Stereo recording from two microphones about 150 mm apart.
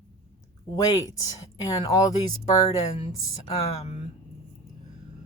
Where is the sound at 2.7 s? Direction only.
45° left (ahead or behind).